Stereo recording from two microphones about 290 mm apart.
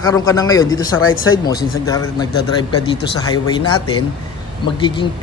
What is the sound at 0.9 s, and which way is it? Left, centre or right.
Speech, left.